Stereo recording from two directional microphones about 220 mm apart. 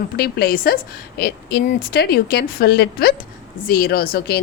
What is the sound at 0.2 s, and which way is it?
A woman's voice, 45° left (ahead or behind).